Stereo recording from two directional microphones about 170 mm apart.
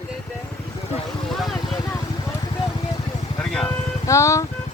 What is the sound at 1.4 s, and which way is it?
Vehicle, centre (ahead or behind).